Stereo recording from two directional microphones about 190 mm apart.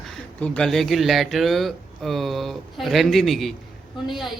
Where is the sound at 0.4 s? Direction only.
5° left (ahead or behind).